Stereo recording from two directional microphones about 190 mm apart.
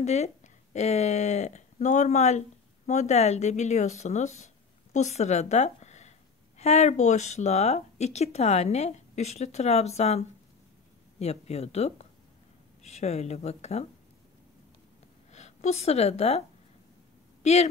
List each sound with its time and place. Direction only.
0.0 s speech: 35° left (ahead or behind)
15.3 s a woman's voice: 35° left (ahead or behind)